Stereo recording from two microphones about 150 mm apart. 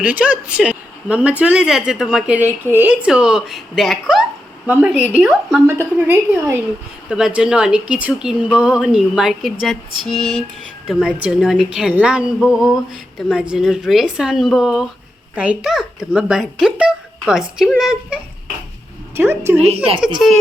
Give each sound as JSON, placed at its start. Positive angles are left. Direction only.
{"t": 0.0, "sound": "a woman's voice", "side_deg": -10}
{"t": 5.6, "sound": "a woman's voice", "side_deg": -15}
{"t": 7.1, "sound": "speech", "side_deg": -5}
{"t": 19.1, "sound": "a woman's voice", "side_deg": -15}
{"t": 19.7, "sound": "speech", "side_deg": -40}
{"t": 20.2, "sound": "speech", "side_deg": 0}